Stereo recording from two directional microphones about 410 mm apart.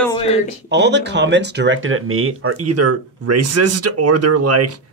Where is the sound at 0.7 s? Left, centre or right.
Right.